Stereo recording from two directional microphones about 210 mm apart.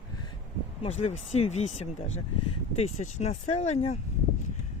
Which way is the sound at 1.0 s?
30° left (ahead or behind).